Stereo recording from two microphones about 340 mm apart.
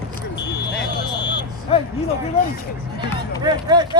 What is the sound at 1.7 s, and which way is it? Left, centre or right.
Speech, centre.